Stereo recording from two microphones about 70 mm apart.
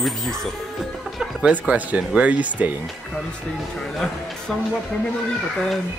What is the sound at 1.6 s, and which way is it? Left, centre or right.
Speech, centre.